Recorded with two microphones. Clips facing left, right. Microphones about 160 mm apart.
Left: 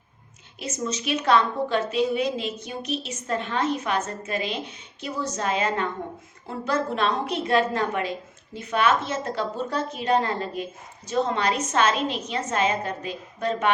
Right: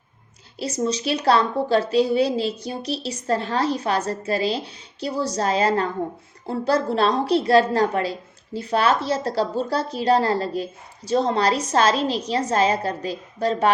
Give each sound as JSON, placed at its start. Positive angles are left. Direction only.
{"t": 0.6, "sound": "a woman's voice", "side_deg": -35}